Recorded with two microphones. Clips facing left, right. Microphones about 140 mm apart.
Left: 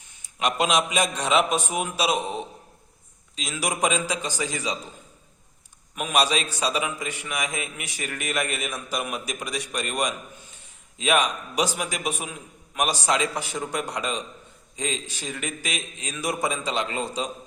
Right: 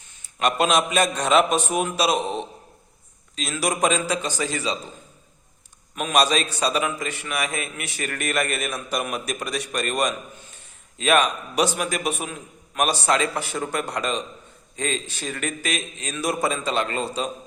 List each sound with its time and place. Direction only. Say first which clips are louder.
0.2 s a sound: right 3 dB; 10° left (ahead or behind)
0.9 s a man's voice: right 3 dB; 10° left (ahead or behind)
2.1 s a man's voice: right 3 dB; 20° right (ahead or behind)
3.3 s a man's voice: right 4 dB; 10° left (ahead or behind)
6.0 s a man's voice: right 3 dB; 10° left (ahead or behind)